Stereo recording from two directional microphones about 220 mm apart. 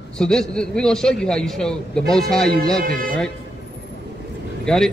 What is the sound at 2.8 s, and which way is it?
Speech, 40° right (ahead or behind).